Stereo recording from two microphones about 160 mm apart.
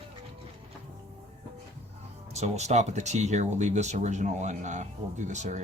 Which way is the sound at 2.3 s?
45° right (ahead or behind).